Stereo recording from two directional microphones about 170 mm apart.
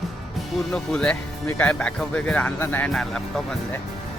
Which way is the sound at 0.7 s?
5° left (ahead or behind).